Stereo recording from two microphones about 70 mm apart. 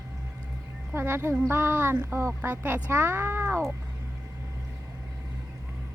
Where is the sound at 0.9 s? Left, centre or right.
Right.